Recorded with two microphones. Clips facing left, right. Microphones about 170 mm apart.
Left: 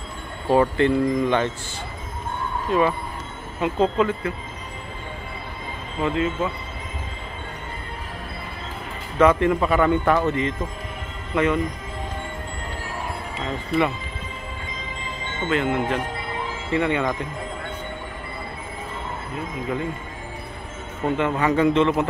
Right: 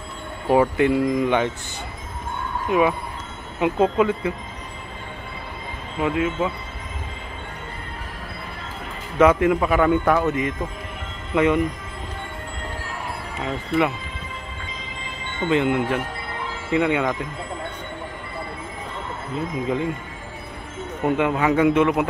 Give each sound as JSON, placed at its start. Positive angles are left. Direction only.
{"t": 0.5, "sound": "speech", "side_deg": -10}
{"t": 3.5, "sound": "speech", "side_deg": -15}
{"t": 5.9, "sound": "speech", "side_deg": -10}
{"t": 9.2, "sound": "speech", "side_deg": -10}
{"t": 15.4, "sound": "speech", "side_deg": -15}
{"t": 19.3, "sound": "speech", "side_deg": -20}
{"t": 21.0, "sound": "speech", "side_deg": -10}